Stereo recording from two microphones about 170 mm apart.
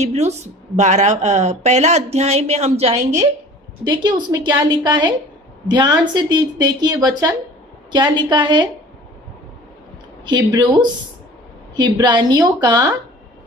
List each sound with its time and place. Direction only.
0.0 s speech: 40° right (ahead or behind)
3.8 s a woman's voice: 25° right (ahead or behind)
10.2 s a woman's voice: 25° right (ahead or behind)